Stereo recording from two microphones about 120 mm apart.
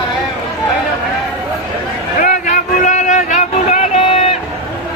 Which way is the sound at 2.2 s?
90° left.